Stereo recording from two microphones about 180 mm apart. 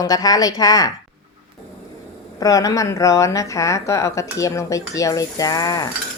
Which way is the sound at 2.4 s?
20° left (ahead or behind).